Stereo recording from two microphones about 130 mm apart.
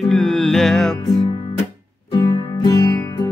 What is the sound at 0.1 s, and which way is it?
Music, centre (ahead or behind).